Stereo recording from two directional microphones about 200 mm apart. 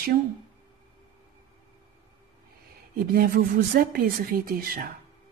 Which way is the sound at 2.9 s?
50° right (ahead or behind).